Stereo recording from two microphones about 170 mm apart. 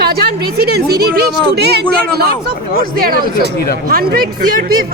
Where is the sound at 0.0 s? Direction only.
65° right (ahead or behind).